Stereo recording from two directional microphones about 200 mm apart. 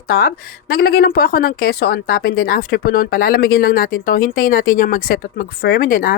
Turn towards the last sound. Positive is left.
turn(degrees=45)  # may be behind; listen again after turning